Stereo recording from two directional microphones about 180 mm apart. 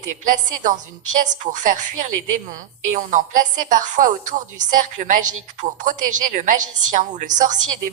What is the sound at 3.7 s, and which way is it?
A woman's voice, 45° right (ahead or behind).